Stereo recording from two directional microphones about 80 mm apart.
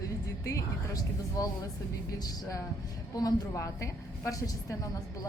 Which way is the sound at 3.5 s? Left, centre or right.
Left.